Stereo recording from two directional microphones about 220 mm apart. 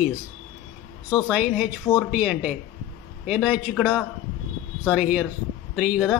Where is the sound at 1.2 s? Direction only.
5° right (ahead or behind).